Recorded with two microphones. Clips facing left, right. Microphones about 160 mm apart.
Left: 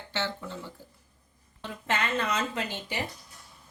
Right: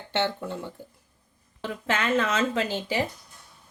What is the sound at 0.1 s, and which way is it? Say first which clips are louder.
Speech: right 6 dB; 60° right (ahead or behind).